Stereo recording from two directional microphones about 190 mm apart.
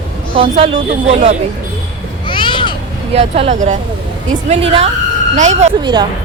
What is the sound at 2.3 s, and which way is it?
Babbling, 25° left (ahead or behind).